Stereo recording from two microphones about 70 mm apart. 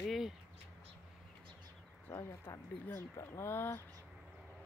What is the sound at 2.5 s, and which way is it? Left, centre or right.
Speech, left.